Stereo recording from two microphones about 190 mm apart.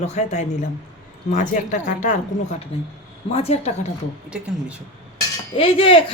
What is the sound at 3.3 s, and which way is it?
Speech, 30° left (ahead or behind).